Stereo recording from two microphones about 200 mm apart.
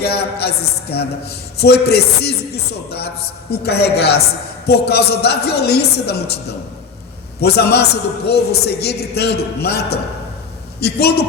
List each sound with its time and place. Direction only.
0.3 s a man's voice: 55° left (ahead or behind)
7.4 s a man's voice: 55° left (ahead or behind)